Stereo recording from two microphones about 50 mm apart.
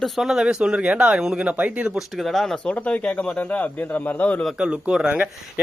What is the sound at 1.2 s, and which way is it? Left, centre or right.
Speech, centre.